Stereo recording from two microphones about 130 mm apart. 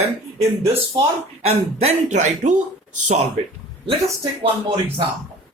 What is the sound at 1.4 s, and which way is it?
Speech, 55° right (ahead or behind).